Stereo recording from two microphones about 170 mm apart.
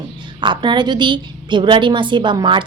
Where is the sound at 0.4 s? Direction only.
25° right (ahead or behind).